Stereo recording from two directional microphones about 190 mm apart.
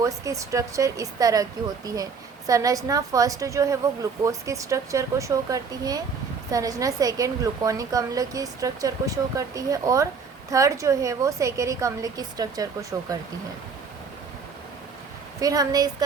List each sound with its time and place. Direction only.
0.0 s a woman's voice: 15° right (ahead or behind)
15.4 s a woman's voice: 20° right (ahead or behind)